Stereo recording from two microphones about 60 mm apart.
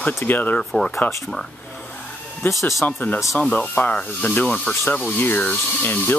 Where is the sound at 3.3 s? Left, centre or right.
Left.